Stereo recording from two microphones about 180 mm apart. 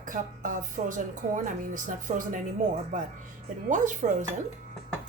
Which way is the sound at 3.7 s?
45° right (ahead or behind).